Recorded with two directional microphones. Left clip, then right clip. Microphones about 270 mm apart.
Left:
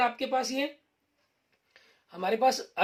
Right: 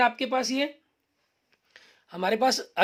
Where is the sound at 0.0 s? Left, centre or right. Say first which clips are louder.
Right 3 dB; right.